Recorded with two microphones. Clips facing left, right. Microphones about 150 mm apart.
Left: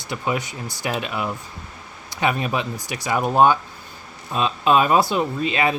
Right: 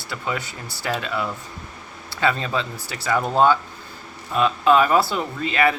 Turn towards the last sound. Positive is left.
turn(degrees=20)  # may be behind; listen again after turning